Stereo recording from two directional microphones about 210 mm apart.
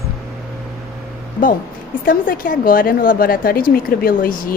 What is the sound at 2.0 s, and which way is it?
A woman's voice, 40° left (ahead or behind).